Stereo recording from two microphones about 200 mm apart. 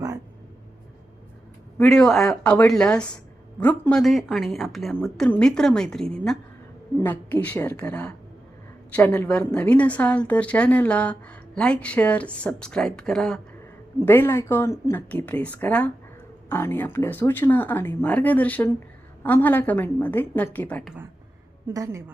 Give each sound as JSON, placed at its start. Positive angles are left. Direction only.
{"t": 1.8, "sound": "a woman's voice", "side_deg": 0}
{"t": 21.7, "sound": "a woman's voice", "side_deg": -15}